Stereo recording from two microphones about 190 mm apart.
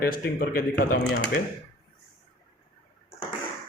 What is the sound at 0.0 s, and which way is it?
A man's voice, 50° left (ahead or behind).